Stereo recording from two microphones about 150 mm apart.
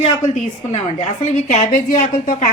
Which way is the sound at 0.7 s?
50° left (ahead or behind).